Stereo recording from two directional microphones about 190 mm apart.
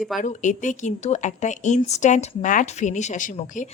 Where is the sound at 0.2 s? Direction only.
40° left (ahead or behind).